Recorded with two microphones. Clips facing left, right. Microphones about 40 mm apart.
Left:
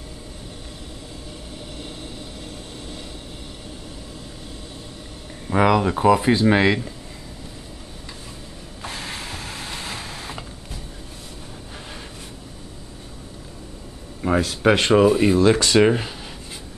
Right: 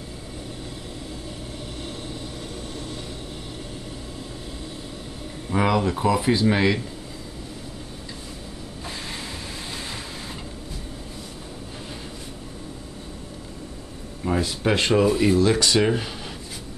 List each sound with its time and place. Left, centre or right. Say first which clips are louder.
5.5 s speech: left 4 dB; centre
14.2 s a sound: left 4 dB; centre
14.6 s speech: left 5 dB; left
15.0 s speech: left 3 dB; centre
15.3 s speech: left 3 dB; left